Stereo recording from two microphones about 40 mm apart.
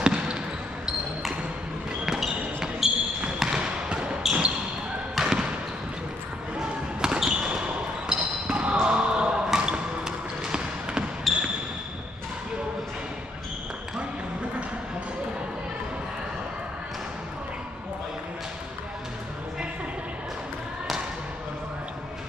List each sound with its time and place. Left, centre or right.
0.0 s trickle: right
2.0 s basketball bounce: centre
5.1 s trickle: centre
6.6 s basketball bounce: centre
11.3 s basketball bounce: centre